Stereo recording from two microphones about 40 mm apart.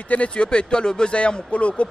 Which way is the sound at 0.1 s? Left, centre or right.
Left.